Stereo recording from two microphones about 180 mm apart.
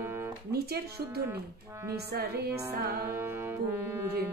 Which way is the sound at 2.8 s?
55° right (ahead or behind).